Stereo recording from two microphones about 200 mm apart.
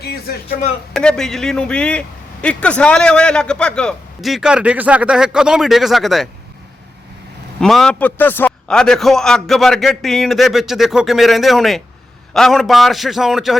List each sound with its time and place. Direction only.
0.0 s speech: 50° left (ahead or behind)
0.9 s a man's voice: 5° left (ahead or behind)
7.6 s a man's voice: 5° left (ahead or behind)